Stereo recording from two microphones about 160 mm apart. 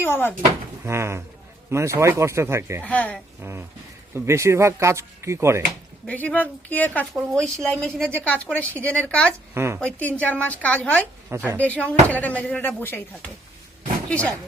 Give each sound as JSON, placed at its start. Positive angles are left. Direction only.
{"t": 0.0, "sound": "speech", "side_deg": 15}
{"t": 0.9, "sound": "speech", "side_deg": -15}
{"t": 2.8, "sound": "speech", "side_deg": 10}
{"t": 4.1, "sound": "speech", "side_deg": -15}
{"t": 6.1, "sound": "a woman's voice", "side_deg": 10}
{"t": 9.6, "sound": "speech", "side_deg": -15}
{"t": 9.8, "sound": "speech", "side_deg": 10}
{"t": 11.3, "sound": "speech", "side_deg": -15}
{"t": 11.6, "sound": "speech", "side_deg": 10}